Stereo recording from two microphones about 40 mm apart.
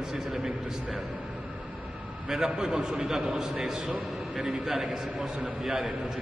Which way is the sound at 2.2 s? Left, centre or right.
Centre.